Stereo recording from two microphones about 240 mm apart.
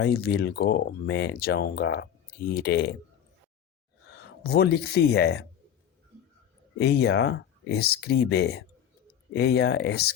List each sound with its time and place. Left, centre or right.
0.0 s speech: left
4.1 s speech: left
6.7 s speech: left